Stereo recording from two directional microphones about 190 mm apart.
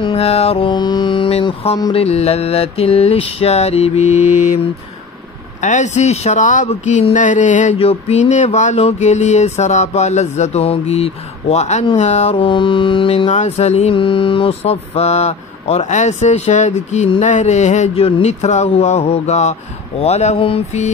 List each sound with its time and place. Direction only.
0.0 s mantra: 30° left (ahead or behind)
1.8 s speech: 25° left (ahead or behind)
5.6 s speech: 40° left (ahead or behind)